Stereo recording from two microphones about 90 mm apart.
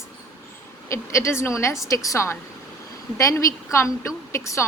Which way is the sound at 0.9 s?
35° left (ahead or behind).